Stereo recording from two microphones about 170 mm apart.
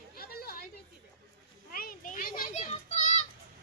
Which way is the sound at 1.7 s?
55° left (ahead or behind).